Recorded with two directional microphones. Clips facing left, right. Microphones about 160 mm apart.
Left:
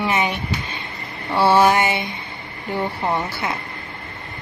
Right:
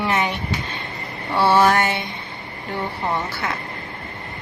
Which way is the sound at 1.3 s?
10° left (ahead or behind).